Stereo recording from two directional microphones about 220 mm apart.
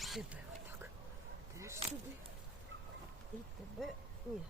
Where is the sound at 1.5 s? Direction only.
15° right (ahead or behind).